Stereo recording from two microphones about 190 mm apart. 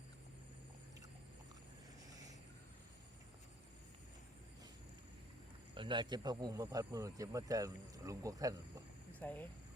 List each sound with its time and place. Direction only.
2.0 s a sound: 20° right (ahead or behind)
5.7 s speech: 25° right (ahead or behind)
9.1 s speech: 10° left (ahead or behind)